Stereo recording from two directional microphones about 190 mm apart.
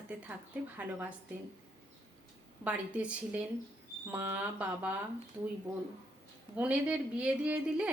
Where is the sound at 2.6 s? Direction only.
5° right (ahead or behind).